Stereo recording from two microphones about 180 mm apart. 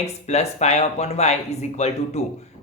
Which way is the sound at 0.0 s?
40° left (ahead or behind).